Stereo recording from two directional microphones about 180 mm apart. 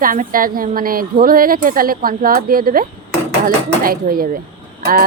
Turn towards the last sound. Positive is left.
turn(degrees=-55)  # may be behind; listen again after turning